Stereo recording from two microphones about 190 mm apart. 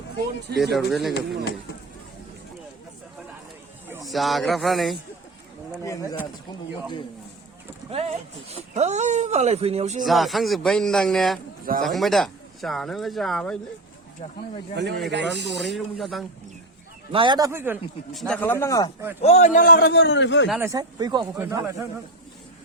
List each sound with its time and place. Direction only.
0.8 s speech: centre (ahead or behind)
4.0 s speech: centre (ahead or behind)
5.8 s speech: 15° left (ahead or behind)
7.9 s speech: 35° right (ahead or behind)
10.0 s speech: centre (ahead or behind)
14.8 s speech: 60° right (ahead or behind)
15.7 s speech: centre (ahead or behind)
17.1 s a man's voice: 25° right (ahead or behind)
18.1 s speech: centre (ahead or behind)
19.2 s a man's voice: 35° left (ahead or behind); by 20.5 s 75° left (ahead or behind)
20.6 s a man's voice: 20° right (ahead or behind)